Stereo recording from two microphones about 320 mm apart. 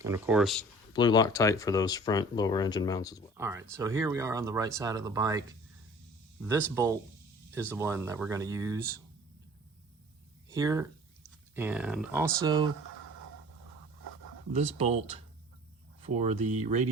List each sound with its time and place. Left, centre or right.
0.0 s speech: centre
0.9 s speech: centre
3.3 s speech: centre
7.7 s speech: centre
10.5 s speech: centre
14.5 s speech: centre